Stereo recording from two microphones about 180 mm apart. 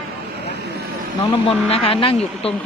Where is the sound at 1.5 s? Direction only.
30° left (ahead or behind).